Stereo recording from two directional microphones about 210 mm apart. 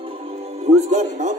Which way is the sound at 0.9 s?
35° right (ahead or behind).